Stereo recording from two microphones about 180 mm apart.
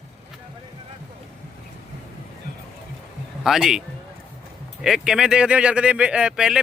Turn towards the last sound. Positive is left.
turn(degrees=-5)  # may be behind; listen again after turning